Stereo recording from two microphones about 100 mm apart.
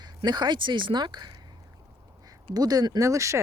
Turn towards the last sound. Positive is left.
turn(degrees=-30)  # may be behind; listen again after turning